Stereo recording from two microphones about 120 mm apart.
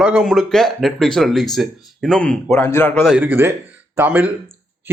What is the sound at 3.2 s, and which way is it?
Speech, 20° right (ahead or behind).